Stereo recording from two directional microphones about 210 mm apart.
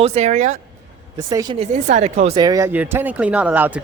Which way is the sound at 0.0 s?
30° right (ahead or behind).